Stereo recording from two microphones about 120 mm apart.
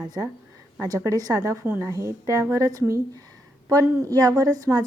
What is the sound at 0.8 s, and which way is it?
A woman's voice, 30° right (ahead or behind).